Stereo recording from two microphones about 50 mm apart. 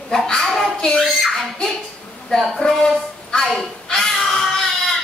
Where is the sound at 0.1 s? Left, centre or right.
Centre.